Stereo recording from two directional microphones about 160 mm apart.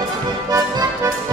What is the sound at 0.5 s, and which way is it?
Music, 20° right (ahead or behind).